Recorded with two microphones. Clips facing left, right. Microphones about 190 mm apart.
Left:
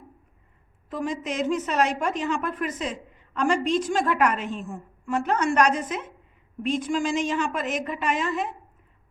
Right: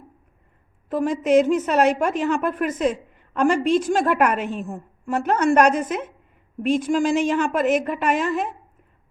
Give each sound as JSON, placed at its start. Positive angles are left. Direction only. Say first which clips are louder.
{"t": 0.9, "sound": "a woman's voice", "louder": "right 9 dB", "side_deg": -55}